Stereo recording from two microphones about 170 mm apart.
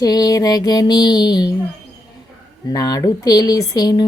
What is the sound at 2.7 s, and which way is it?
Speech, 20° left (ahead or behind).